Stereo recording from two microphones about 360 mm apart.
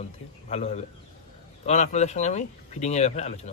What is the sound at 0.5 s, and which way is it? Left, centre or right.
Speech, centre.